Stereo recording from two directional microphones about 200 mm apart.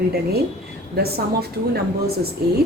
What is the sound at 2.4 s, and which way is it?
Speech, 50° right (ahead or behind).